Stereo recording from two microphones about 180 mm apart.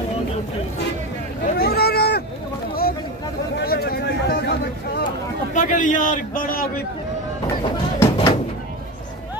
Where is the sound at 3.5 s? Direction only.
60° left (ahead or behind).